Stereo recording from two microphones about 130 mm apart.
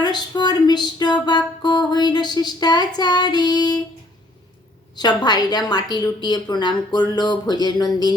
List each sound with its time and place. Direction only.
0.0 s music: 30° left (ahead or behind)
4.9 s music: 30° left (ahead or behind)